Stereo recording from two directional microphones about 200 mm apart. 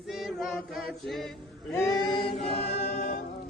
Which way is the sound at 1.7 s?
15° left (ahead or behind).